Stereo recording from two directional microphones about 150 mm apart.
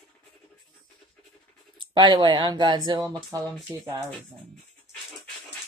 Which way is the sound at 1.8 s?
35° right (ahead or behind).